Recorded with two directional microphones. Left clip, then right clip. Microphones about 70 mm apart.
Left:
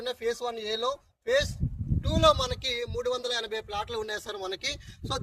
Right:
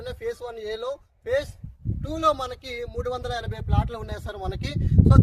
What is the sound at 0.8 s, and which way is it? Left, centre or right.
Speech, right.